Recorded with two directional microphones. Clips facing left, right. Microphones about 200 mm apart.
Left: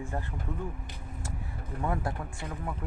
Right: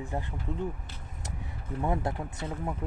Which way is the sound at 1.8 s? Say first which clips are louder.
Right 2 dB; 20° right (ahead or behind).